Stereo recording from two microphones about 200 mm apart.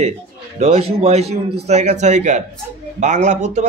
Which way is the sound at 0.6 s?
30° right (ahead or behind).